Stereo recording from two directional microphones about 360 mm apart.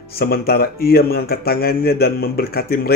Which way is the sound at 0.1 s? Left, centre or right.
Left.